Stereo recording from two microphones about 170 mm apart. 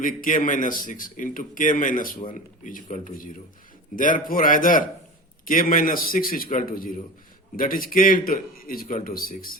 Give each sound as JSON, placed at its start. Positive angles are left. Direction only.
{"t": 0.0, "sound": "a man's voice", "side_deg": 50}